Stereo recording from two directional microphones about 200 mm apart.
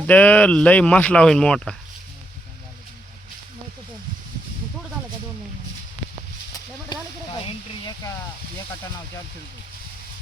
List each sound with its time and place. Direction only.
0.1 s speech: 5° left (ahead or behind)
6.9 s sizzle: 20° left (ahead or behind)
7.4 s snake: 20° left (ahead or behind)